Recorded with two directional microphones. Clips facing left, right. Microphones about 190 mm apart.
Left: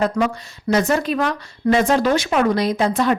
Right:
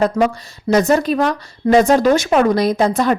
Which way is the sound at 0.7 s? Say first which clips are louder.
Right 4 dB; 40° right (ahead or behind).